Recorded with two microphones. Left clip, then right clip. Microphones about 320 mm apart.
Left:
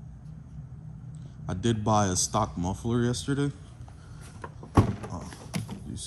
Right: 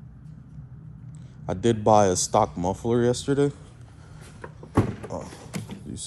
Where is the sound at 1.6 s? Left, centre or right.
Centre.